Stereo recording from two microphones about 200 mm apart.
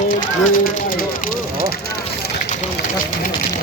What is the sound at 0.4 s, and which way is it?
Speech, 45° left (ahead or behind).